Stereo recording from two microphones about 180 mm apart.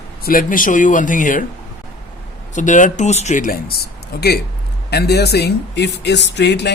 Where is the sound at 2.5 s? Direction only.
45° left (ahead or behind).